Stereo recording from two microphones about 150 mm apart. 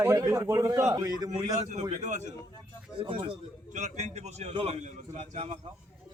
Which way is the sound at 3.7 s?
55° right (ahead or behind).